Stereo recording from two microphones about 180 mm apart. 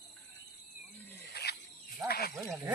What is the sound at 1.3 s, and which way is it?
Wild animals, 65° left (ahead or behind).